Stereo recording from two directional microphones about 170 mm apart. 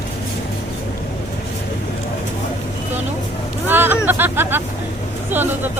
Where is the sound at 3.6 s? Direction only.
10° right (ahead or behind).